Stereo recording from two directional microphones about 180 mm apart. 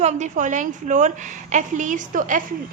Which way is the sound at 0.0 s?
40° right (ahead or behind).